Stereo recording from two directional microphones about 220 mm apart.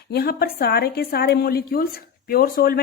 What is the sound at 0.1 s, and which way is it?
A woman's voice, 45° left (ahead or behind).